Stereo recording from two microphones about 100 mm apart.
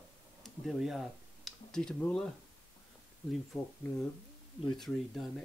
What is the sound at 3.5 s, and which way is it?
Speech, 10° right (ahead or behind).